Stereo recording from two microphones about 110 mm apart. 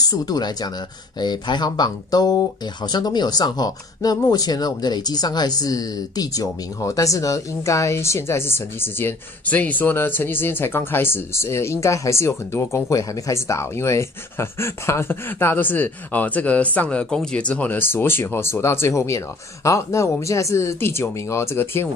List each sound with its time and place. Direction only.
0.0 s speech: 35° left (ahead or behind)